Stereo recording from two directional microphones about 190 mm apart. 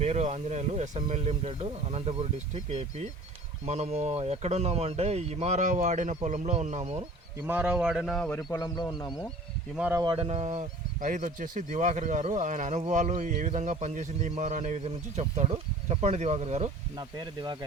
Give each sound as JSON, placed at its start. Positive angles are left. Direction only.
{"t": 0.0, "sound": "speech", "side_deg": -35}
{"t": 7.4, "sound": "speech", "side_deg": -10}
{"t": 8.5, "sound": "speech", "side_deg": 20}
{"t": 9.7, "sound": "speech", "side_deg": -5}
{"t": 10.0, "sound": "speech", "side_deg": -25}
{"t": 17.0, "sound": "speech", "side_deg": -20}